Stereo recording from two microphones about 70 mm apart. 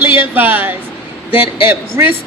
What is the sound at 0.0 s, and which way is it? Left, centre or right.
Speech, right.